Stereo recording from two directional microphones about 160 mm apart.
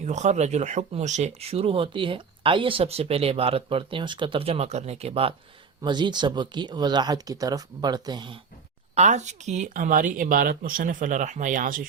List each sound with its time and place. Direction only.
0.0 s speech: 50° right (ahead or behind)
5.8 s speech: 30° right (ahead or behind)
9.0 s speech: 45° right (ahead or behind)